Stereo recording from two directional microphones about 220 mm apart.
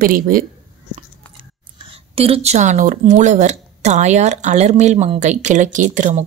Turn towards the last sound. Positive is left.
turn(degrees=-35)  # may be behind; listen again after turning